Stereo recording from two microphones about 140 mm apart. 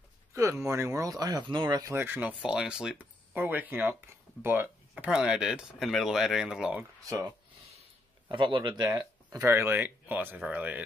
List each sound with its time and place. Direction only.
0.3 s speech: 20° right (ahead or behind)
7.1 s speech: 25° right (ahead or behind)
8.3 s speech: 35° right (ahead or behind)
8.8 s speech: 25° right (ahead or behind)